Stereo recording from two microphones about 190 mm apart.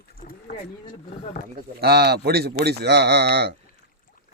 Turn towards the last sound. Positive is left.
turn(degrees=-60)  # may be behind; listen again after turning